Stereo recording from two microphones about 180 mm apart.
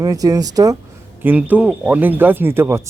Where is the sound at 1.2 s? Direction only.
10° right (ahead or behind).